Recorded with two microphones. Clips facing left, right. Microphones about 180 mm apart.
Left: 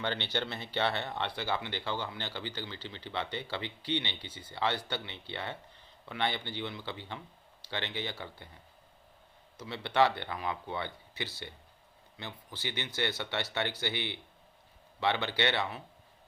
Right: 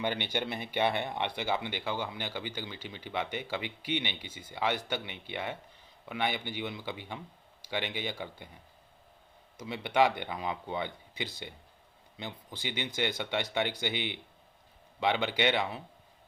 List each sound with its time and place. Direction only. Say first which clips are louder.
0.0 s speech: right 2 dB; 15° right (ahead or behind)
9.6 s speech: right 1 dB; 15° right (ahead or behind)